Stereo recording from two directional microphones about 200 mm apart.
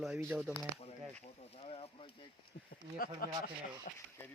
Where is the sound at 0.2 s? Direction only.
5° right (ahead or behind).